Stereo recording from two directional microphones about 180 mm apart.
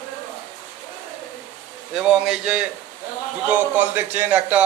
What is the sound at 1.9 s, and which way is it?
A man's voice, 5° right (ahead or behind).